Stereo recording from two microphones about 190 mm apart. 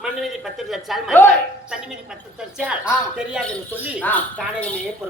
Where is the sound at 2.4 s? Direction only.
5° right (ahead or behind).